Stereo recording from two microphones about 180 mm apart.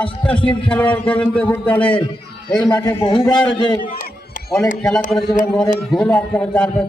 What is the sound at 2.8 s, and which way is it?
Speech, 25° left (ahead or behind).